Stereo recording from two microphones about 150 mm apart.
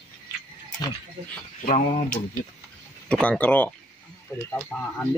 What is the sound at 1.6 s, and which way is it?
Speech, 50° left (ahead or behind).